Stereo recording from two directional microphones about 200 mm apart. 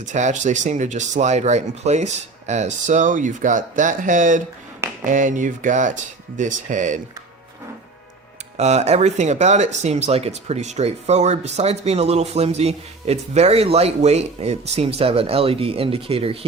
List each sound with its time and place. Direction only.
0.0 s speech: 35° right (ahead or behind)
8.5 s speech: 35° right (ahead or behind)